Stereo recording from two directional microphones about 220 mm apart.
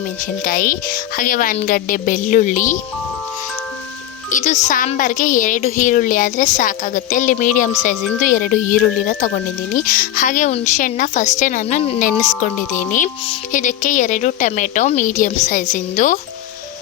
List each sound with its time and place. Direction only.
0.4 s speech: 40° left (ahead or behind)
4.3 s speech: 35° left (ahead or behind)